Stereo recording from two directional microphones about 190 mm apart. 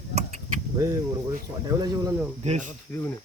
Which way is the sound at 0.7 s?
15° right (ahead or behind).